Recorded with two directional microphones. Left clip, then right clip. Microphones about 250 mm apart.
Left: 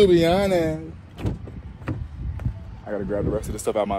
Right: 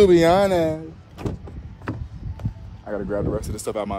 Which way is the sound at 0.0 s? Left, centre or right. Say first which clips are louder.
Right 2 dB; right.